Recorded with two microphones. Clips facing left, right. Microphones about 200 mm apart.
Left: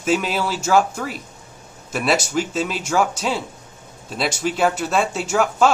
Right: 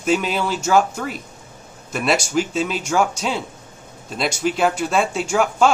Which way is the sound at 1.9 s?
Centre (ahead or behind).